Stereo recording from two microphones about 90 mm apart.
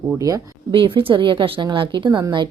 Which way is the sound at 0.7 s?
75° right (ahead or behind).